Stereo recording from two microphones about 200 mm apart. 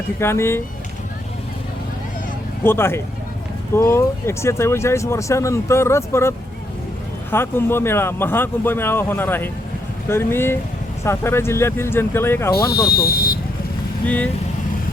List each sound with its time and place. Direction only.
0.2 s speech: 10° left (ahead or behind)
2.6 s speech: 10° left (ahead or behind)
12.9 s speech: 50° left (ahead or behind)